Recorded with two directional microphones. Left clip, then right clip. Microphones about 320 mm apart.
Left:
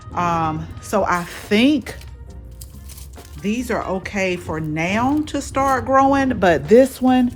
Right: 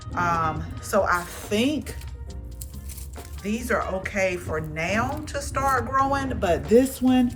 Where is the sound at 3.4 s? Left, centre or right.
Centre.